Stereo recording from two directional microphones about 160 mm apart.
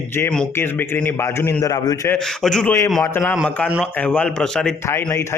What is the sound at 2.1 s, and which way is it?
Speech, 5° left (ahead or behind).